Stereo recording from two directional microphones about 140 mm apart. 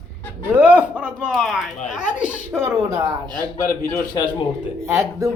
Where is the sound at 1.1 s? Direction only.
Centre (ahead or behind).